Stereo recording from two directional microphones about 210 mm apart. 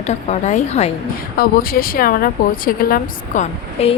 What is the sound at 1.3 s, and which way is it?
Speech, 45° left (ahead or behind).